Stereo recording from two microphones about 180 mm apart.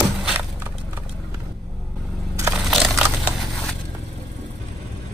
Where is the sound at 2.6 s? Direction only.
Centre (ahead or behind).